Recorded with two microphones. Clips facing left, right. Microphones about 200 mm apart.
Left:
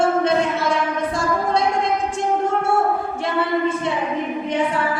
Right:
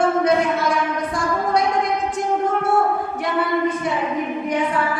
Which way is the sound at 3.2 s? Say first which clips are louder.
Even; 25° left (ahead or behind).